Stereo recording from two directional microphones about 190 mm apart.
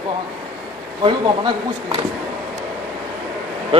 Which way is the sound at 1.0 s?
20° right (ahead or behind).